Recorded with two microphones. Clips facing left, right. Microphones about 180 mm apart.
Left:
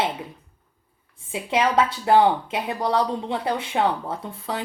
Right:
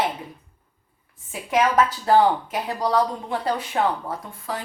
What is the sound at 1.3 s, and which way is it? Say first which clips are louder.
Speech: right 1 dB; 25° left (ahead or behind).